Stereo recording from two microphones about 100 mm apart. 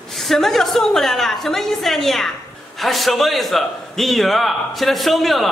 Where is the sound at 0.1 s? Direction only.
Centre (ahead or behind).